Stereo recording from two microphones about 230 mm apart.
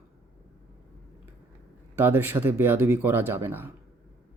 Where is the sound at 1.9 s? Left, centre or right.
Centre.